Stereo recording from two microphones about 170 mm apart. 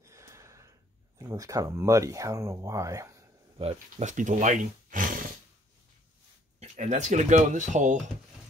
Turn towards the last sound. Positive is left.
turn(degrees=-45)  # may be behind; listen again after turning